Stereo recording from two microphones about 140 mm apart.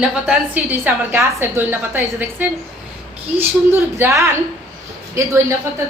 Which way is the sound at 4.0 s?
20° right (ahead or behind).